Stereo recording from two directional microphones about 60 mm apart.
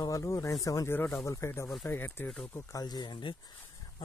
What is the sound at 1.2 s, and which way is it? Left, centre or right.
Speech, left.